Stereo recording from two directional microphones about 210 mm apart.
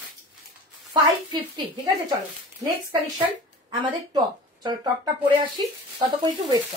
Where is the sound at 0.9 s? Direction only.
15° right (ahead or behind).